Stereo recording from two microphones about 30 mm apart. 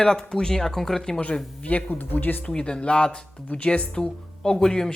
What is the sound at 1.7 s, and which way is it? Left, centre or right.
Speech, left.